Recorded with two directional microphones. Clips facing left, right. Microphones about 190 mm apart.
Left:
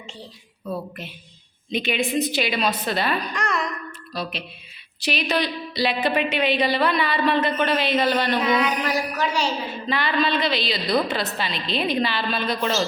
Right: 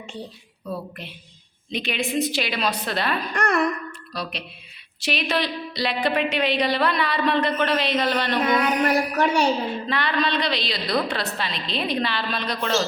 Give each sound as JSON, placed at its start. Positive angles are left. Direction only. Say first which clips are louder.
{"t": 1.7, "sound": "a woman's voice", "louder": "left 2 dB", "side_deg": 0}
{"t": 3.3, "sound": "mantra", "louder": "right 4 dB", "side_deg": -55}
{"t": 4.1, "sound": "a woman's voice", "louder": "left 2 dB", "side_deg": 0}
{"t": 8.5, "sound": "mantra", "louder": "right 2 dB", "side_deg": -55}
{"t": 9.9, "sound": "a woman's voice", "louder": "left 3 dB", "side_deg": 0}